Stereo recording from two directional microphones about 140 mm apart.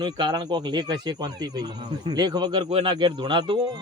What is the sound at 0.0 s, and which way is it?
Speech, 30° right (ahead or behind).